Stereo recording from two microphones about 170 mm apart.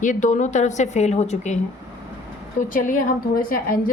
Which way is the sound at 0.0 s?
50° left (ahead or behind).